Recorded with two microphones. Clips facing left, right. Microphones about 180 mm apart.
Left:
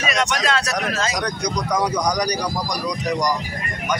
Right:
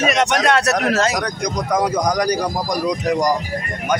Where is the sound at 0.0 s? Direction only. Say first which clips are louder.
Right 5 dB; 60° right (ahead or behind).